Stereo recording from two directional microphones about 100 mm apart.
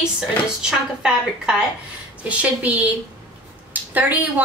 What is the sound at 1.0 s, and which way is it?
A woman's voice, 10° right (ahead or behind).